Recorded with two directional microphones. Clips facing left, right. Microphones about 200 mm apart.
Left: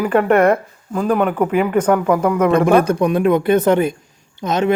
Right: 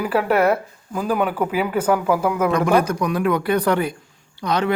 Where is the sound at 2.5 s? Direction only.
25° left (ahead or behind).